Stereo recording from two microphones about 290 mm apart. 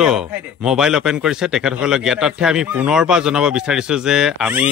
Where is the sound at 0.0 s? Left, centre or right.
Centre.